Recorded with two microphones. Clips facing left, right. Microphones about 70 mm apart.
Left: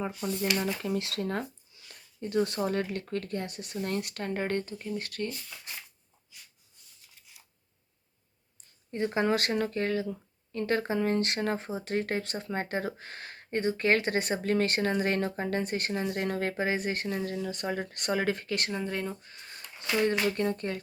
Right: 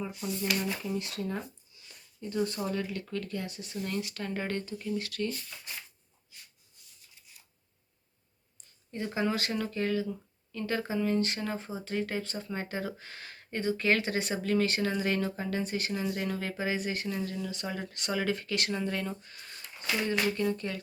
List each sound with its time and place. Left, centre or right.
0.2 s speech: left
0.6 s speech: left
1.9 s a sound: left
2.6 s speech: left
3.8 s speech: left
8.9 s speech: left
9.5 s speech: left
12.2 s speech: left
18.7 s speech: centre
20.1 s speech: left